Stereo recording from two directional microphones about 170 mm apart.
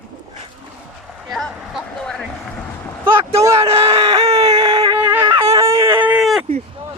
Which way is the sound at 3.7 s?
35° right (ahead or behind).